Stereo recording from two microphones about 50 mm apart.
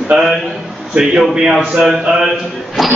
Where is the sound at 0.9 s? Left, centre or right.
Right.